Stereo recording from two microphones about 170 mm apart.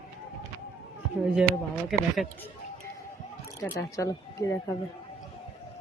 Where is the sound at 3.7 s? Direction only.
20° left (ahead or behind).